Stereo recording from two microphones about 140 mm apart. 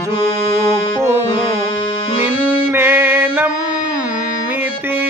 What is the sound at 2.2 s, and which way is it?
Music, 15° right (ahead or behind).